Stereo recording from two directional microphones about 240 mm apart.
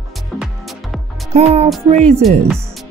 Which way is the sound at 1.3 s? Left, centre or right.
Right.